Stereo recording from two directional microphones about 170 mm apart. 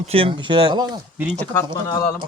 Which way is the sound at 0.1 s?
35° right (ahead or behind).